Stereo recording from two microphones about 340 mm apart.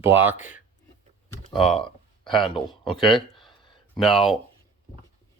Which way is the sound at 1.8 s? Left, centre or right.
Centre.